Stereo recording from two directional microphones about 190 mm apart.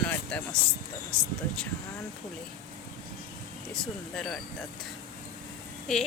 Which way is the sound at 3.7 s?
Centre (ahead or behind).